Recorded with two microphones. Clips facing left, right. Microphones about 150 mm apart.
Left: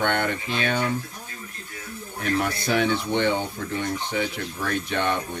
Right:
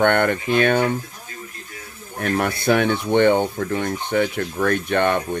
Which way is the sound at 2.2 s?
55° right (ahead or behind).